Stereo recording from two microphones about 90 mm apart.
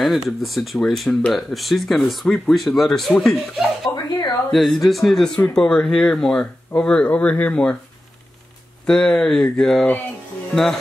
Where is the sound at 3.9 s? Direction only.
20° left (ahead or behind).